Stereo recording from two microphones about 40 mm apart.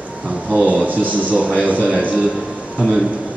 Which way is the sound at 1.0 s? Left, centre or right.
Right.